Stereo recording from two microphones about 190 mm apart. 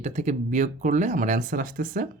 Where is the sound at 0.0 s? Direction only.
35° right (ahead or behind).